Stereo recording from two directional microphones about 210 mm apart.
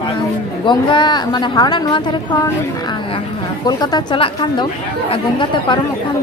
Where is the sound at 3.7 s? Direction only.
20° left (ahead or behind).